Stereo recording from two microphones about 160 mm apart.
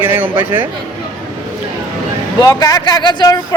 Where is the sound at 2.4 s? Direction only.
25° left (ahead or behind).